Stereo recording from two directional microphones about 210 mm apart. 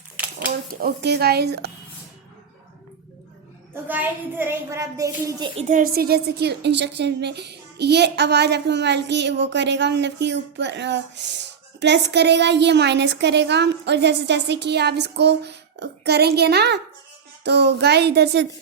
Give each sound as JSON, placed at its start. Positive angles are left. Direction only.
{"t": 0.3, "sound": "speech", "side_deg": -45}
{"t": 3.8, "sound": "a child's voice", "side_deg": -10}
{"t": 5.5, "sound": "a woman's voice", "side_deg": -35}